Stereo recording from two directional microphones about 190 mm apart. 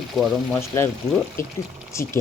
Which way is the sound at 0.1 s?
Centre (ahead or behind).